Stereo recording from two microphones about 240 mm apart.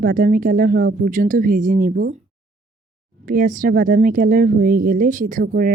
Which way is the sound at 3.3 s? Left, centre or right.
Right.